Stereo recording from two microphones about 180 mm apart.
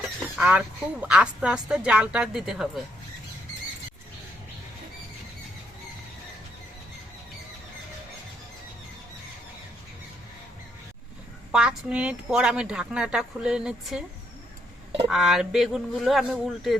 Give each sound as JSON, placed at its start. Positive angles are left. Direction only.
{"t": 0.0, "sound": "a sound", "side_deg": -5}
{"t": 1.0, "sound": "a woman's voice", "side_deg": -5}
{"t": 11.5, "sound": "a woman's voice", "side_deg": -5}
{"t": 15.1, "sound": "a woman's voice", "side_deg": 0}